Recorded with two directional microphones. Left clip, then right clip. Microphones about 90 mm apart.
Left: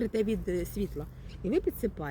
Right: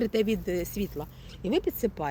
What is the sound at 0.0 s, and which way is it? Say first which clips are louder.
Speech: right 3 dB; 25° left (ahead or behind).